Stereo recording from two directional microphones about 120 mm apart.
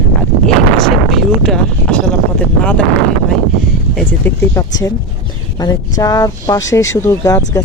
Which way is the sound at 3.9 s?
10° left (ahead or behind).